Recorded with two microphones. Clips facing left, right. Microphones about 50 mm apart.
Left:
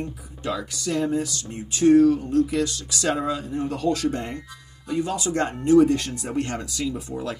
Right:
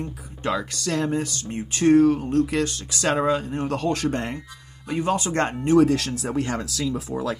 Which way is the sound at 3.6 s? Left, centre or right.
Right.